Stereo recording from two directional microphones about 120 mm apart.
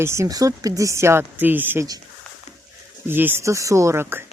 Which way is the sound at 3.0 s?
20° right (ahead or behind).